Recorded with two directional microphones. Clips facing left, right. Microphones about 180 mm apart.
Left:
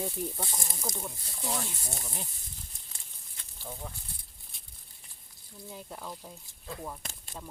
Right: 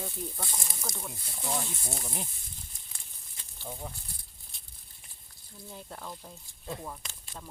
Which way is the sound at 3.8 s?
15° right (ahead or behind).